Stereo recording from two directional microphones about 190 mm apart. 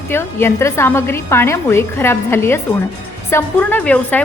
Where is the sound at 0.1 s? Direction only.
10° left (ahead or behind).